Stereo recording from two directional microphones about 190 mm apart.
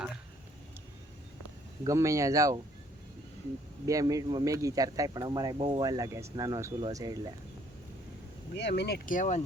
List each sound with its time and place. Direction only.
1.8 s speech: 15° right (ahead or behind)
3.8 s speech: 20° right (ahead or behind)
8.5 s speech: 60° left (ahead or behind); by 9.4 s 40° left (ahead or behind)